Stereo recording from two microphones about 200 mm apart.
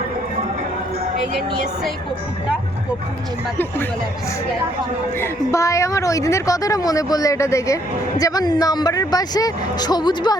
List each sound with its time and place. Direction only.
5.1 s a woman's voice: 15° left (ahead or behind)